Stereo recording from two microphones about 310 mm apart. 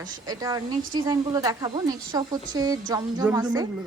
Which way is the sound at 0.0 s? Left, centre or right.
Centre.